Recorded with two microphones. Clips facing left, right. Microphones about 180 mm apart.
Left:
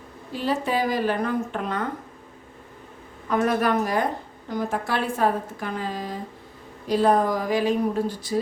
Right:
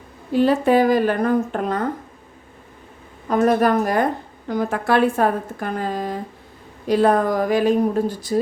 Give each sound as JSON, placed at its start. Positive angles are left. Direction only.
{"t": 0.3, "sound": "a woman's voice", "side_deg": -55}
{"t": 3.2, "sound": "a woman's voice", "side_deg": -40}
{"t": 4.4, "sound": "a woman's voice", "side_deg": -65}